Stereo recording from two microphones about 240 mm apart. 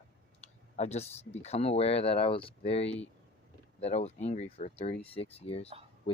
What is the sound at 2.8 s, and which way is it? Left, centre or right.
Speech, left.